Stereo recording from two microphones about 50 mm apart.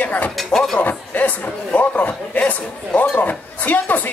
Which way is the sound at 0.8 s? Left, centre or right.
Left.